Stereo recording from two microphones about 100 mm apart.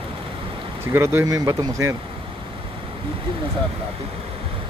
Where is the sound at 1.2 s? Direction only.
35° right (ahead or behind).